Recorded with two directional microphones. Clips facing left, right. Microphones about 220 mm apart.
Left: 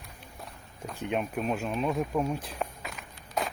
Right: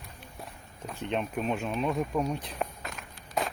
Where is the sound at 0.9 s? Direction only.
10° left (ahead or behind).